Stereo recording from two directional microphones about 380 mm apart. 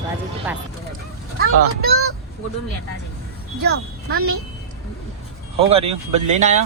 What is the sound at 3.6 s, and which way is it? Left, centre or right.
Speech, right.